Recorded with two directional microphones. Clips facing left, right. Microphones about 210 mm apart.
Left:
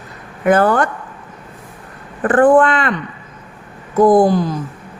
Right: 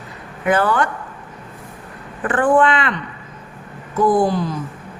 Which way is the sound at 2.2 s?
45° left (ahead or behind).